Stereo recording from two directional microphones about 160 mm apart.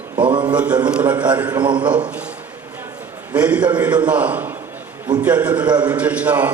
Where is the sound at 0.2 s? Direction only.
30° right (ahead or behind).